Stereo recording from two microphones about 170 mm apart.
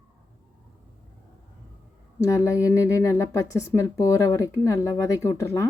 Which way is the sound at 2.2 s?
20° left (ahead or behind).